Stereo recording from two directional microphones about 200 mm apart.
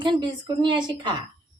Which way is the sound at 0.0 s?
25° right (ahead or behind).